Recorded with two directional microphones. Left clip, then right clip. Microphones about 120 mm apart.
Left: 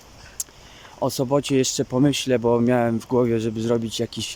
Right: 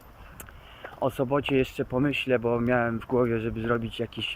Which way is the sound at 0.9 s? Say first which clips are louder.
Left 4 dB; 45° left (ahead or behind).